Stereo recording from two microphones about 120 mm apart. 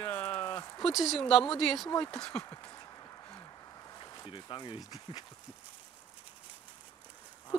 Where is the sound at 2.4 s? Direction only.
30° left (ahead or behind).